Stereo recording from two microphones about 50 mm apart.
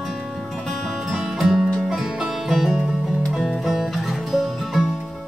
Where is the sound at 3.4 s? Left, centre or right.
Centre.